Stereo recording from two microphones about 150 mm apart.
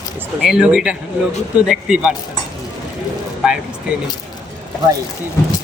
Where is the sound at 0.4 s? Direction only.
5° right (ahead or behind).